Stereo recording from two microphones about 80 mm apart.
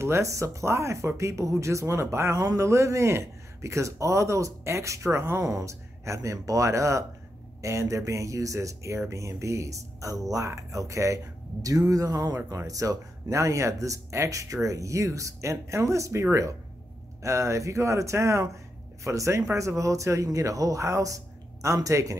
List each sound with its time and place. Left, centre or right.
0.0 s speech: right